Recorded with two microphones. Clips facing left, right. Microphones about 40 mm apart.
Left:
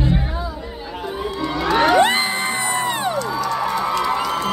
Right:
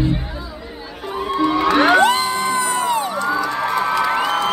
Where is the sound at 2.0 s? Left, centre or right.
Left.